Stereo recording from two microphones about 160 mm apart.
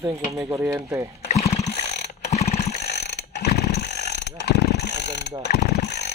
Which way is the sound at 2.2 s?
45° left (ahead or behind).